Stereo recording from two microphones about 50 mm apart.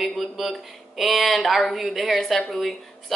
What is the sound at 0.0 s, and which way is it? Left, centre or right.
Speech, centre.